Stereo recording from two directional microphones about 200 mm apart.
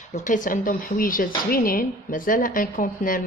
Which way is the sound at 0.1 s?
40° left (ahead or behind).